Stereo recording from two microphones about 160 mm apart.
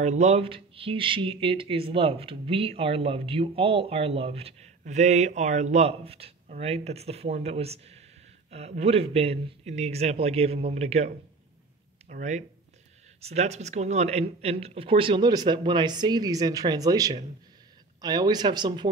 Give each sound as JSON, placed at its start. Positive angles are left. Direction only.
{"t": 0.0, "sound": "speech", "side_deg": -45}
{"t": 12.1, "sound": "speech", "side_deg": -50}